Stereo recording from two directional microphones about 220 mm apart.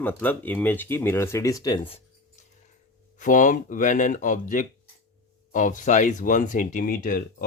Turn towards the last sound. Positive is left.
turn(degrees=40)  # may be behind; listen again after turning